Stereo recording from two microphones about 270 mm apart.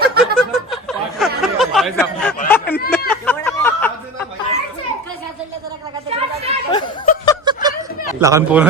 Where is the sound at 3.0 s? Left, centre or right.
Centre.